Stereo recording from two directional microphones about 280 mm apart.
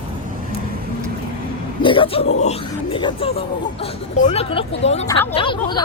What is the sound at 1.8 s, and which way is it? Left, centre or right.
A man's voice, centre.